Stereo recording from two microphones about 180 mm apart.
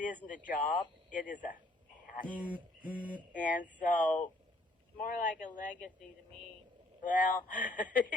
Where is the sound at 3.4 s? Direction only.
45° left (ahead or behind).